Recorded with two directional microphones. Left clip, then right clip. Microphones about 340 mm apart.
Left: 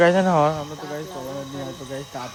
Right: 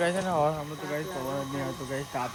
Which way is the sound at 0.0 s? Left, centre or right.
Left.